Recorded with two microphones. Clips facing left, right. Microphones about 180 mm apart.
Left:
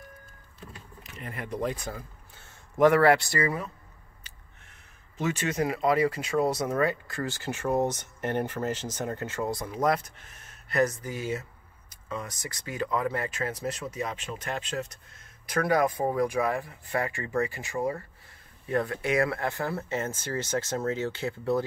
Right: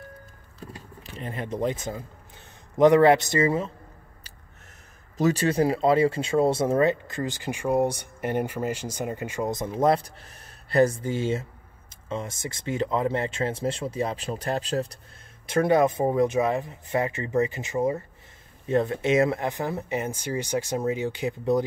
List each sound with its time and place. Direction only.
1.0 s speech: 30° right (ahead or behind)
5.1 s speech: 35° right (ahead or behind); by 21.6 s 15° right (ahead or behind)